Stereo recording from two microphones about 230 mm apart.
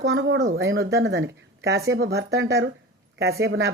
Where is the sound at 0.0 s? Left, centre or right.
Right.